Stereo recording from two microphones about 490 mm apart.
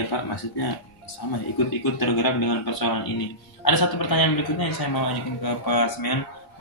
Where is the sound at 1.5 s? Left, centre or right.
Left.